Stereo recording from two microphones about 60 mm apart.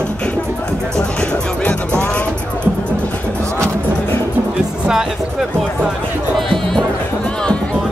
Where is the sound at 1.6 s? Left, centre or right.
Left.